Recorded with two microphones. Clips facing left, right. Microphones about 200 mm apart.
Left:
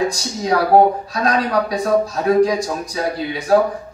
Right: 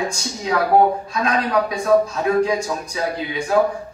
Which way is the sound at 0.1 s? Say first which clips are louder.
Left 3 dB; 35° left (ahead or behind).